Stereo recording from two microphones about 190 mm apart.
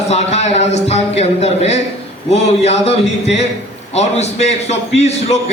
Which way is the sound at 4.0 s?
35° left (ahead or behind).